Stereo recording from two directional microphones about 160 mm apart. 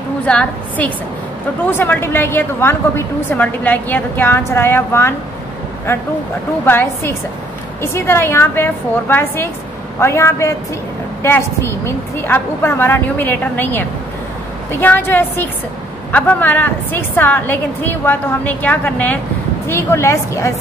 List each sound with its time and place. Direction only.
0.3 s a woman's voice: 10° left (ahead or behind)